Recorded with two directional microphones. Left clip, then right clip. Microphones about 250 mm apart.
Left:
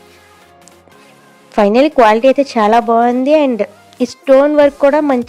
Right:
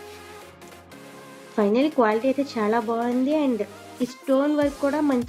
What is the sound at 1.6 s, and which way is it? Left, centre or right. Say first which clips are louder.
A woman's voice: left 12 dB; left.